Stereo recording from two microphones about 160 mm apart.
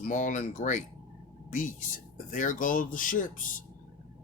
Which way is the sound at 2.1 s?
55° left (ahead or behind).